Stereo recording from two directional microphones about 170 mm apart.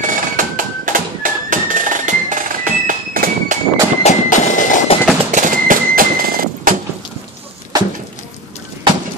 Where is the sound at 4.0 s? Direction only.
45° left (ahead or behind).